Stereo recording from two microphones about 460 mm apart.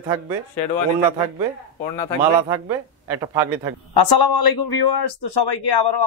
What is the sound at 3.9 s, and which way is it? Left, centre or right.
A man's voice, left.